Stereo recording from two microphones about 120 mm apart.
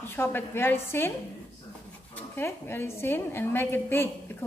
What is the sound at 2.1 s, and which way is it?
A woman's voice, 20° left (ahead or behind).